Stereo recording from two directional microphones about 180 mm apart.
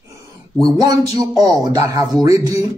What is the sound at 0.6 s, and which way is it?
Speech, 20° right (ahead or behind).